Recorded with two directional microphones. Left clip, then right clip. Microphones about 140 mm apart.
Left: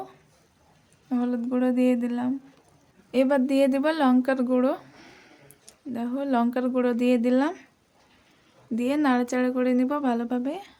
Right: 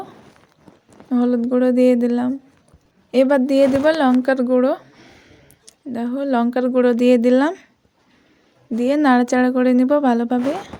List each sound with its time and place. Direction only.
1.1 s a woman's voice: 35° right (ahead or behind)
5.6 s a woman's voice: 40° right (ahead or behind)
8.7 s a woman's voice: 35° right (ahead or behind)